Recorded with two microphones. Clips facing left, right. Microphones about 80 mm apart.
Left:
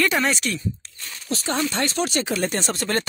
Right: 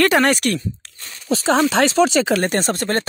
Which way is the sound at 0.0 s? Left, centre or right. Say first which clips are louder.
Right 6 dB; right.